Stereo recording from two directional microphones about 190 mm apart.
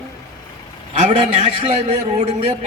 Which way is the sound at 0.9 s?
35° right (ahead or behind).